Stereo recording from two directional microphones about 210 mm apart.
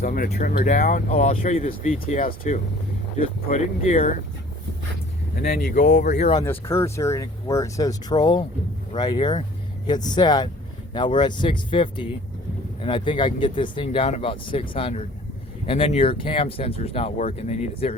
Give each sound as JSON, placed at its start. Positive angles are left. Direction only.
{"t": 0.0, "sound": "speech", "side_deg": 40}
{"t": 5.5, "sound": "speech", "side_deg": 35}
{"t": 6.4, "sound": "speech", "side_deg": 10}